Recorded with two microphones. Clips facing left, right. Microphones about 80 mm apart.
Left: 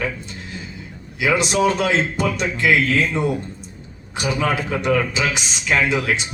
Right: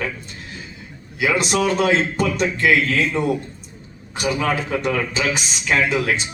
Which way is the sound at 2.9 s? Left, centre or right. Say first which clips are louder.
Left 1 dB; left.